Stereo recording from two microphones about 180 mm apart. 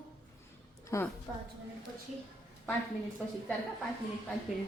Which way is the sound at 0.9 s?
20° left (ahead or behind).